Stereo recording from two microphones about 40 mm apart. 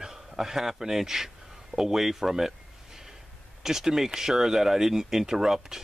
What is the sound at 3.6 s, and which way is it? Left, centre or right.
Speech, centre.